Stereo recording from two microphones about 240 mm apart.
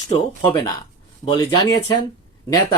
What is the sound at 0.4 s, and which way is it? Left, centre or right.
Speech, centre.